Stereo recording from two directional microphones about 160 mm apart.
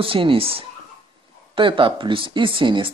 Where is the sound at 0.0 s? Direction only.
35° right (ahead or behind).